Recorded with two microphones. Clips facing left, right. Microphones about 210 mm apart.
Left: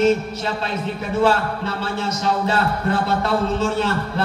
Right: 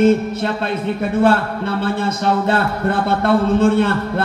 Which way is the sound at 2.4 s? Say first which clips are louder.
Right 3 dB; 55° right (ahead or behind).